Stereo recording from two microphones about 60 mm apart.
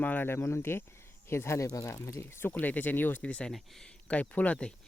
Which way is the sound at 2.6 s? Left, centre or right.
Left.